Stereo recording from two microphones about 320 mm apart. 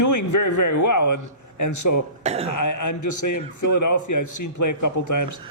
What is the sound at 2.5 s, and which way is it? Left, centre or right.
A man's voice, left.